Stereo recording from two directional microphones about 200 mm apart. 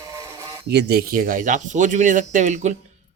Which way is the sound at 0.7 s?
55° right (ahead or behind).